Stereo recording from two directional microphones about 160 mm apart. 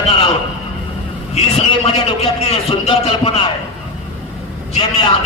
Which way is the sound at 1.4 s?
40° left (ahead or behind).